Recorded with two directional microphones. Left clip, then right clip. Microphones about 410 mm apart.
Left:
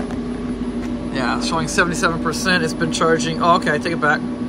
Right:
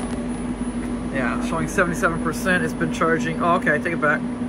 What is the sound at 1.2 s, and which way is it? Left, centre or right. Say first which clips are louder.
Speech: left 5 dB; centre.